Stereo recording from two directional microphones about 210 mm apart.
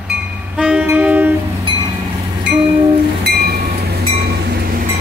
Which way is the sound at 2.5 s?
25° right (ahead or behind).